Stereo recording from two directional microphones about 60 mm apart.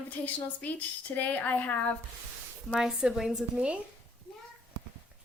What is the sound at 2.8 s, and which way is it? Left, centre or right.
Speech, centre.